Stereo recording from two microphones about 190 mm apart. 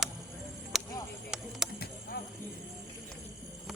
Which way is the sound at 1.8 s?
55° left (ahead or behind).